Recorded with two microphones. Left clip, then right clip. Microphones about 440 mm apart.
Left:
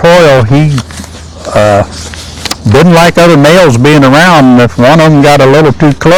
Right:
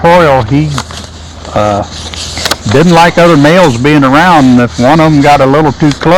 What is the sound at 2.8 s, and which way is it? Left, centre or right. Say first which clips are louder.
A man's voice: left 1 dB; left.